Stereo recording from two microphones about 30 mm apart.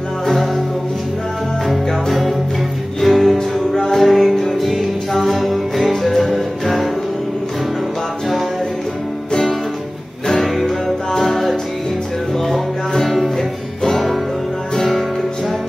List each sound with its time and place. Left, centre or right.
3.0 s music: centre
4.1 s music: centre
10.4 s music: centre